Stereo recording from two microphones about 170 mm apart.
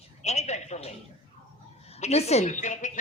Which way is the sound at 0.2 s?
40° left (ahead or behind).